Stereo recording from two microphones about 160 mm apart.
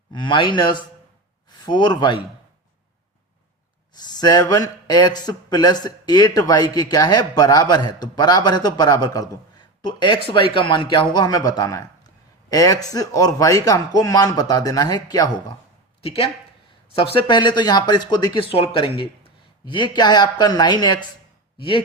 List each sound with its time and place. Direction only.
0.1 s a man's voice: 30° left (ahead or behind)
3.9 s a man's voice: 25° left (ahead or behind)
16.0 s a man's voice: 35° left (ahead or behind)